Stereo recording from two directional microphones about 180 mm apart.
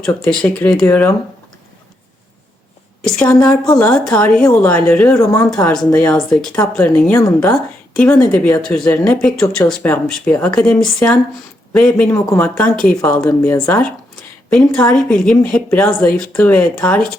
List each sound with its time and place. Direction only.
0.0 s speech: 5° left (ahead or behind)
3.0 s speech: 5° left (ahead or behind)
5.9 s speech: 5° left (ahead or behind)
14.9 s speech: 5° left (ahead or behind)